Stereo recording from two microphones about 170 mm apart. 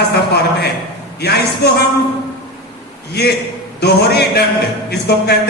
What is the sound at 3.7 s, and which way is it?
Speech, 75° left (ahead or behind).